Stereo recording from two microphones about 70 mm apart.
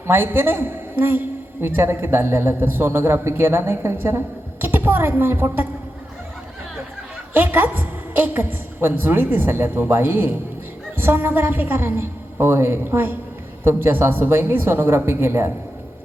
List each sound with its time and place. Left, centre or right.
0.1 s a man's voice: right
7.3 s a woman's voice: right